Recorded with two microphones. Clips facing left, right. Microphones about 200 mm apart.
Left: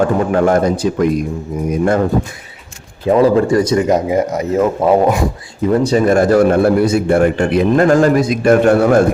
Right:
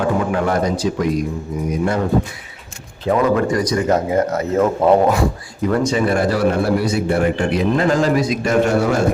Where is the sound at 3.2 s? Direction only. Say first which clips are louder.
Left 6 dB; 30° left (ahead or behind).